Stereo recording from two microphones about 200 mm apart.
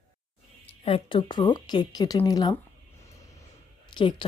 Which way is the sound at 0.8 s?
25° left (ahead or behind).